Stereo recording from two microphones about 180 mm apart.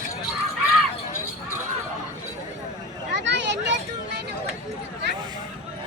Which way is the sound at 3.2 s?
80° right.